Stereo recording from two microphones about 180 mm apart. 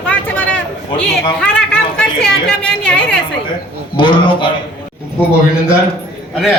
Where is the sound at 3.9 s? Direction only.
25° left (ahead or behind).